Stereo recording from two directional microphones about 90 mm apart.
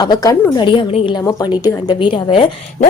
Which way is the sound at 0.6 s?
70° left (ahead or behind).